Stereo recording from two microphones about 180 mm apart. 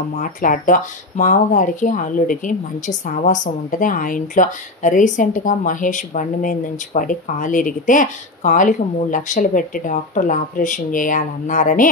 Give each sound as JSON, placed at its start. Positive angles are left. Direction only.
{"t": 0.2, "sound": "speech", "side_deg": 50}